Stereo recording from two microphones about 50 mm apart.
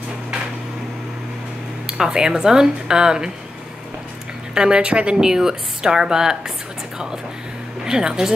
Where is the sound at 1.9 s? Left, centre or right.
Centre.